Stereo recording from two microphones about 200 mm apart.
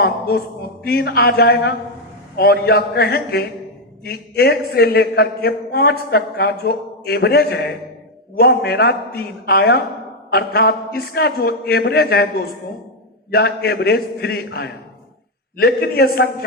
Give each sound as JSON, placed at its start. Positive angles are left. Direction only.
{"t": 0.0, "sound": "a man's voice", "side_deg": 50}
{"t": 13.3, "sound": "a man's voice", "side_deg": 50}